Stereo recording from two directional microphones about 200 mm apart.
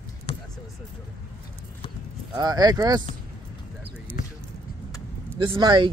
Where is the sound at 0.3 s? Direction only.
25° left (ahead or behind).